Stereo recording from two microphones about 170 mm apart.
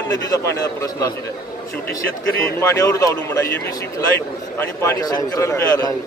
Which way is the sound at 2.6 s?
20° left (ahead or behind).